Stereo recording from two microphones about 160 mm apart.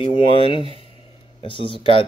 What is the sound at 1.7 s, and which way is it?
Speech, 35° left (ahead or behind).